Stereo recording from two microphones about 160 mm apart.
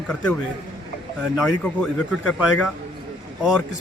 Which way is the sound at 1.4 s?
5° left (ahead or behind).